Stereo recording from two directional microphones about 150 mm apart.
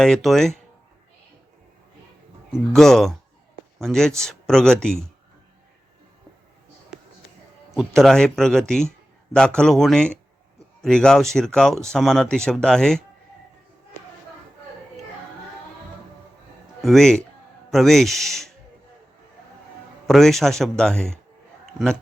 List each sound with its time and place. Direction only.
0.0 s speech: centre (ahead or behind)
2.5 s speech: centre (ahead or behind)
7.7 s speech: centre (ahead or behind)
16.8 s speech: centre (ahead or behind)
20.1 s speech: centre (ahead or behind)